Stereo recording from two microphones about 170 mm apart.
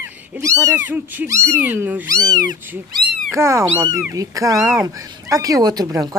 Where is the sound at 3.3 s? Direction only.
15° right (ahead or behind).